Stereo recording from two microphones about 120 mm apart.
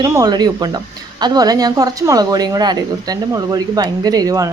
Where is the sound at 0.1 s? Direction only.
35° right (ahead or behind).